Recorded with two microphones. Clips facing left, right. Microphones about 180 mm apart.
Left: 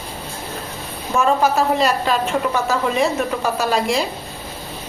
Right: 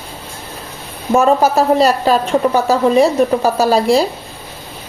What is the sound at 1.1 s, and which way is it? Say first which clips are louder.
A woman's voice: right 5 dB; 40° right (ahead or behind).